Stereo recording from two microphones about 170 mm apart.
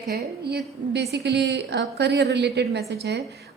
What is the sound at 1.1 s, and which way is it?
A woman's voice, 90° right.